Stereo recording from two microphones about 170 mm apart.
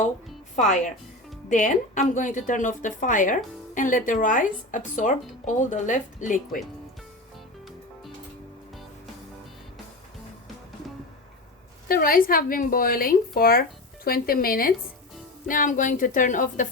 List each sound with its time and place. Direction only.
1.5 s a woman's voice: 50° left (ahead or behind)
11.9 s a woman's voice: 60° left (ahead or behind)